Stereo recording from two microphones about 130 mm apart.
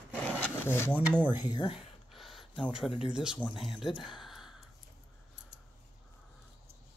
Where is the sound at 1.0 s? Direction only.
10° right (ahead or behind).